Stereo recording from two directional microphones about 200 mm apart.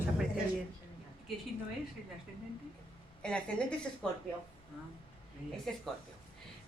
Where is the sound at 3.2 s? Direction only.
5° left (ahead or behind).